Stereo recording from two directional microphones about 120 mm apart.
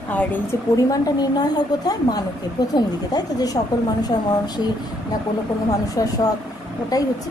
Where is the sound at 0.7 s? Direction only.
30° left (ahead or behind).